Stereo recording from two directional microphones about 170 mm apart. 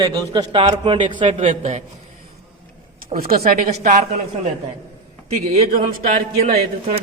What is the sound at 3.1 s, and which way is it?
Speech, 60° right (ahead or behind).